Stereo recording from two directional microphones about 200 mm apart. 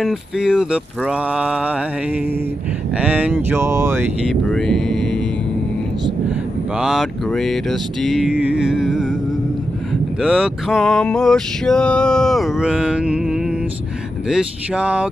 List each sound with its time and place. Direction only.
0.0 s male singing: 5° right (ahead or behind)
3.0 s speech: 5° right (ahead or behind)
4.5 s male singing: 5° left (ahead or behind)
6.8 s male singing: centre (ahead or behind)
10.2 s male singing: centre (ahead or behind)